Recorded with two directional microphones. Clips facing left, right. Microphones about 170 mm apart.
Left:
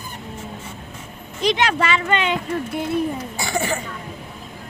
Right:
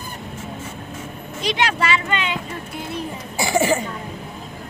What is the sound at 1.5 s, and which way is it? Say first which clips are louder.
Speech: left 1 dB; 45° left (ahead or behind).